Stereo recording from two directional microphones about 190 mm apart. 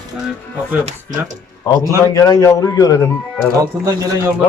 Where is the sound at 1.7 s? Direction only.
20° left (ahead or behind).